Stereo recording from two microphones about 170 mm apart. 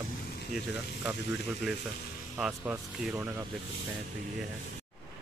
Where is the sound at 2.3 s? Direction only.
10° right (ahead or behind).